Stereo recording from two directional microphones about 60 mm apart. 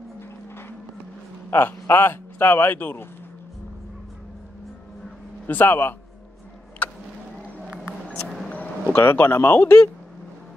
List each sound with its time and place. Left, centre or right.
1.5 s speech: left
5.5 s speech: left
6.8 s vehicle: left
8.1 s music: centre
8.9 s speech: left